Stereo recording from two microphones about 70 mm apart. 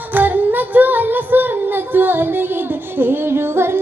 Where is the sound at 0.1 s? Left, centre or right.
Right.